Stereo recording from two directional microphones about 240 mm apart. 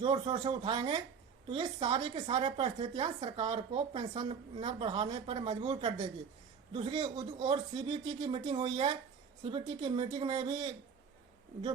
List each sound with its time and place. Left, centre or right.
0.0 s speech: right